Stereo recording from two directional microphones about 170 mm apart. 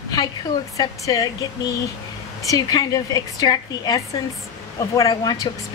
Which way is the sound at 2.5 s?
20° left (ahead or behind).